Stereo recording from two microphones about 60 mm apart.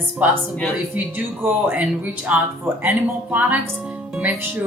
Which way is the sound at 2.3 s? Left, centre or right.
Right.